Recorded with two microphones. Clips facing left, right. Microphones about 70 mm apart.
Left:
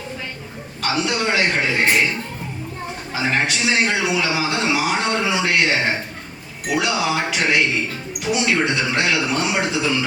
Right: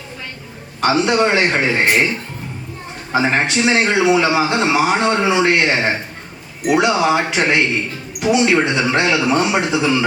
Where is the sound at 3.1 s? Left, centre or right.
Right.